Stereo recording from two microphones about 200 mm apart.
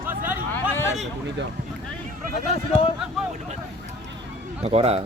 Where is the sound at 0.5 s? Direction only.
10° left (ahead or behind).